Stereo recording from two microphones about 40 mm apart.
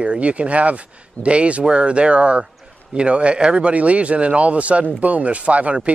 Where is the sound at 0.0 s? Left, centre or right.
Right.